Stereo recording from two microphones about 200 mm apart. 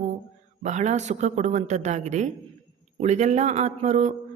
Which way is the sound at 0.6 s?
35° right (ahead or behind).